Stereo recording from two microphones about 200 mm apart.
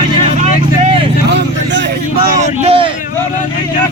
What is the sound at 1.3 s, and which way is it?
Speech, 60° right (ahead or behind).